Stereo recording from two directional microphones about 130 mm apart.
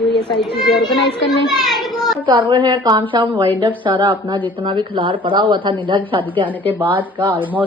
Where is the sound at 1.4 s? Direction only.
Centre (ahead or behind).